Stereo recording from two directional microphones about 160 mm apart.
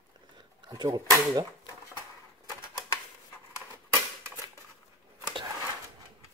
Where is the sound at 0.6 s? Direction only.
25° right (ahead or behind).